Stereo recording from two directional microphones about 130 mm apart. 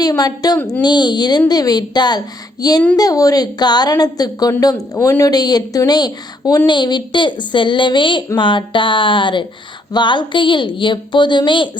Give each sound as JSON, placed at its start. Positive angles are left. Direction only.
{"t": 0.0, "sound": "a woman's voice", "side_deg": 30}